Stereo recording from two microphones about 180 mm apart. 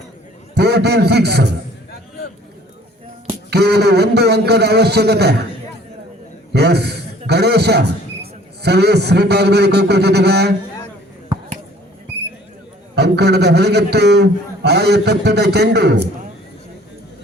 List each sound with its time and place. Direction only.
0.5 s a man's voice: 65° right (ahead or behind)
3.5 s a man's voice: 65° right (ahead or behind)
6.5 s a man's voice: 65° right (ahead or behind)
13.0 s a man's voice: 65° right (ahead or behind)